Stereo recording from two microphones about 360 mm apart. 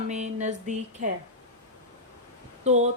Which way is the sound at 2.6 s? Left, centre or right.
Centre.